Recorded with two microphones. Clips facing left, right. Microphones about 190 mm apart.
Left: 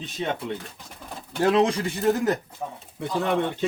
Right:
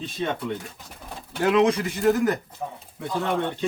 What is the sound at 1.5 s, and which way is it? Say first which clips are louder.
Speech: right 1 dB; 30° left (ahead or behind).